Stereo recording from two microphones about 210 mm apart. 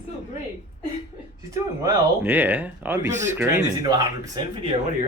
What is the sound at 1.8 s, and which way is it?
Speech, 10° right (ahead or behind).